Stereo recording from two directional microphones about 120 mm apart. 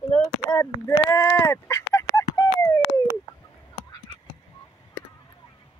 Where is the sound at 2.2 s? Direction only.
25° left (ahead or behind).